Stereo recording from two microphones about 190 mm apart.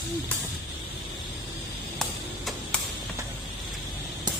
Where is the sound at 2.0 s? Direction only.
Centre (ahead or behind).